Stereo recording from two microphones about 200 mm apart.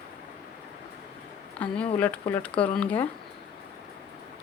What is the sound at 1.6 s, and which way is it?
Speech, 5° left (ahead or behind).